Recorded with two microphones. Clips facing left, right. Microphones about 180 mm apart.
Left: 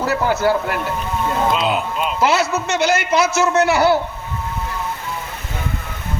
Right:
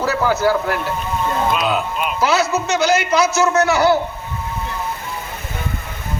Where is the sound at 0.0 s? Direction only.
25° left (ahead or behind).